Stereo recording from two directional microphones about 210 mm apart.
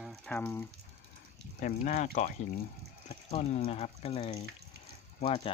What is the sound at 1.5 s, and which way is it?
Speech, 40° left (ahead or behind).